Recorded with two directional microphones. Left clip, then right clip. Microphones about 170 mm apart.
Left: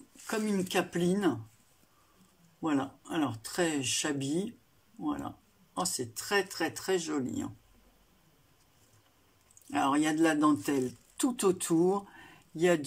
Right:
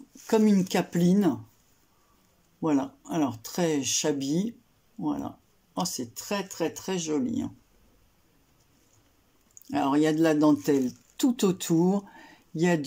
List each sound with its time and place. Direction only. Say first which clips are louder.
0.3 s speech: right 8 dB; 25° right (ahead or behind)
2.6 s speech: right 5 dB; 20° right (ahead or behind)
9.7 s speech: right 4 dB; 20° right (ahead or behind)